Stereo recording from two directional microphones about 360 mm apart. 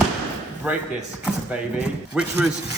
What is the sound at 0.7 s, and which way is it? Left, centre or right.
A man's voice, centre.